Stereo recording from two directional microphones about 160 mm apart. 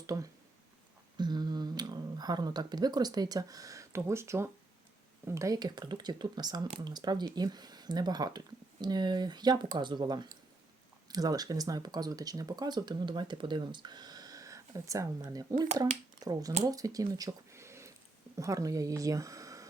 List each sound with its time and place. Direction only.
0.1 s speech: 20° right (ahead or behind)